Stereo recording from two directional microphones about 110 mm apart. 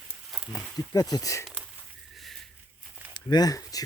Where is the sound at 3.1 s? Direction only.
40° left (ahead or behind).